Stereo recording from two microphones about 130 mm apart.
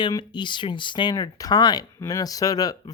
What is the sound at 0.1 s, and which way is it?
Speech, 35° left (ahead or behind).